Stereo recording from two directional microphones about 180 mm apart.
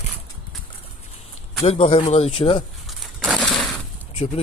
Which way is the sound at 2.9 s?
Centre (ahead or behind).